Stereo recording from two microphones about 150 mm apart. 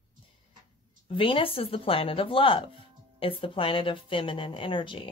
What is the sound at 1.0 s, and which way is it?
Speech, 35° left (ahead or behind).